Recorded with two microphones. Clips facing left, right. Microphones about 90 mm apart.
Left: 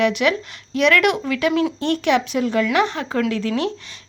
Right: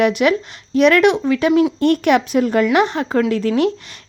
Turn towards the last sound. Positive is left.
turn(degrees=-40)  # may be behind; listen again after turning